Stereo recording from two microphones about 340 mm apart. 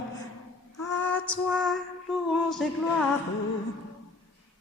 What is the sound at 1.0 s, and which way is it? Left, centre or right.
Female singing, centre.